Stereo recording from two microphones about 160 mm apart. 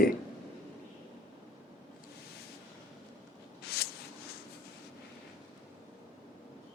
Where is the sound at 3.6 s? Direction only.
80° left.